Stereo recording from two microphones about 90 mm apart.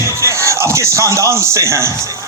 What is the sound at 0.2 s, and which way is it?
Speech, 30° right (ahead or behind).